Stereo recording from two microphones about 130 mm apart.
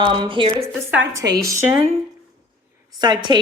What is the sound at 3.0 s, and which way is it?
Speech, 35° right (ahead or behind).